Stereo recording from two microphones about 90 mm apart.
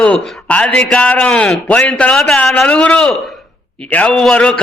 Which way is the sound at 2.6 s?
15° left (ahead or behind).